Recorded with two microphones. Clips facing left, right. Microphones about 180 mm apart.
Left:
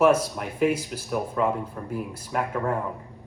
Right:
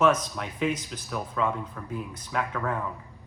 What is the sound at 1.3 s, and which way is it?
Speech, 30° left (ahead or behind).